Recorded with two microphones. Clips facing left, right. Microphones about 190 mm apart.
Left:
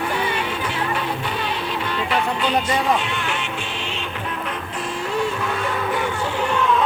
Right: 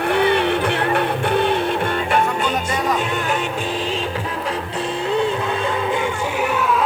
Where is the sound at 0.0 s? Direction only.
65° right (ahead or behind); by 4.6 s 35° right (ahead or behind).